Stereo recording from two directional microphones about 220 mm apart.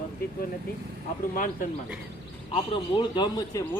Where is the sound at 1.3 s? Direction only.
40° left (ahead or behind).